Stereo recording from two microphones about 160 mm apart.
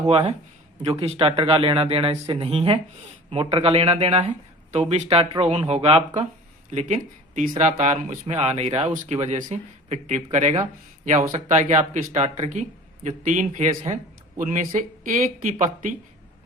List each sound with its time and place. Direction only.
0.1 s speech: 35° right (ahead or behind); by 15.9 s 55° right (ahead or behind)